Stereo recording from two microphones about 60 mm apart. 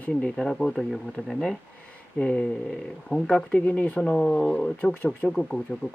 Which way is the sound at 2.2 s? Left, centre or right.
Centre.